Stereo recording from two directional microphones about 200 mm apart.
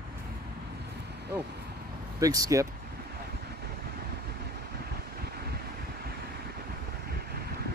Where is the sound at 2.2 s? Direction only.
15° right (ahead or behind).